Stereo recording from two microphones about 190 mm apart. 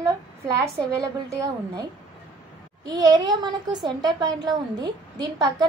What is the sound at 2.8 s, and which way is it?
A woman's voice, 20° right (ahead or behind).